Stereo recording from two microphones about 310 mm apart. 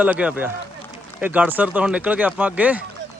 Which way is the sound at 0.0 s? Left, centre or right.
Centre.